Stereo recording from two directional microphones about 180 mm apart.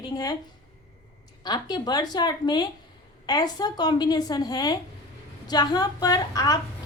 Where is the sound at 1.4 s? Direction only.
20° left (ahead or behind).